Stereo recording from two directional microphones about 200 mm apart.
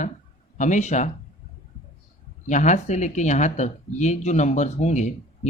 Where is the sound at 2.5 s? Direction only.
35° left (ahead or behind).